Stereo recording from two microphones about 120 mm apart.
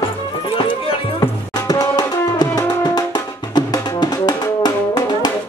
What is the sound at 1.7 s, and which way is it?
Music, 30° left (ahead or behind).